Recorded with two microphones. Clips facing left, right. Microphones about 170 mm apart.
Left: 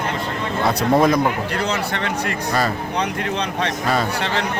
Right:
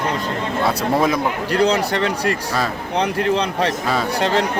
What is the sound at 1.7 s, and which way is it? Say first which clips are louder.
Speech: right 4 dB; 35° right (ahead or behind).